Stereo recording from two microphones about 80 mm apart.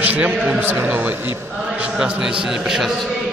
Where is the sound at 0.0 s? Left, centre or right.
Centre.